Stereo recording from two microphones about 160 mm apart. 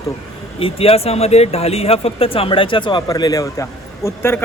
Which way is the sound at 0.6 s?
35° left (ahead or behind).